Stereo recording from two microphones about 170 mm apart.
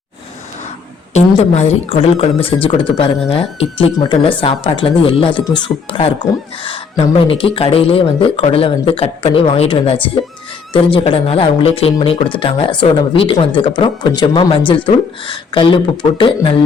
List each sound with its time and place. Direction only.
1.1 s speech: 40° left (ahead or behind)